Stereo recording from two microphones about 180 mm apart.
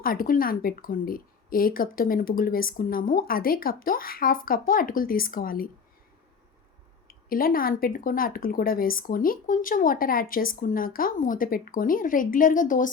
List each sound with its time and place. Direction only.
0.0 s speech: 50° left (ahead or behind)
7.1 s speech: 55° left (ahead or behind)